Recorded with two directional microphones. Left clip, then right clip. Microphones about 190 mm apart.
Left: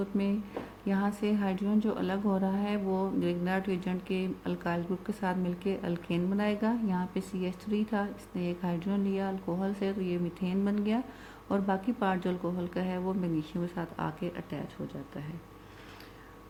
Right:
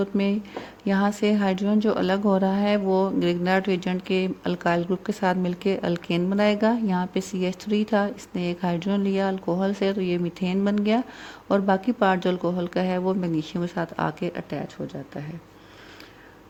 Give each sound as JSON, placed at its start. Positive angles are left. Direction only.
{"t": 0.0, "sound": "speech", "side_deg": -40}